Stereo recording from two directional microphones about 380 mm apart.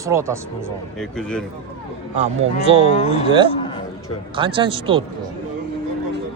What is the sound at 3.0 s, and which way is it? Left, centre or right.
Speech, centre.